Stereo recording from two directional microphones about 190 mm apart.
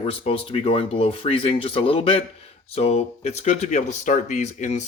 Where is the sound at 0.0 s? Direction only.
30° left (ahead or behind).